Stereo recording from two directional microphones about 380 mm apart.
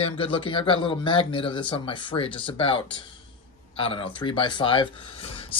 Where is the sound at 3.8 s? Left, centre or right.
Centre.